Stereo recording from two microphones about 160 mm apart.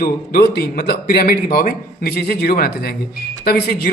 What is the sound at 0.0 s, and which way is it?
A man's voice, 70° left (ahead or behind).